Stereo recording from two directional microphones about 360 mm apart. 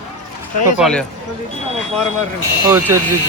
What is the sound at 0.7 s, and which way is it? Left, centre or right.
Speech, centre.